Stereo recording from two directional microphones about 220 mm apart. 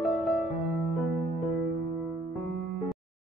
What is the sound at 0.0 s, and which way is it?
Music, centre (ahead or behind).